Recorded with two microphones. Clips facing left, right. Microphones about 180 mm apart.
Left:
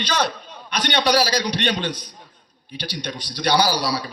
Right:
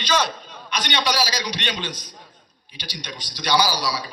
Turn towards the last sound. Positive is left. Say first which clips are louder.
# left 2 dB
turn(degrees=60)  # may be behind; listen again after turning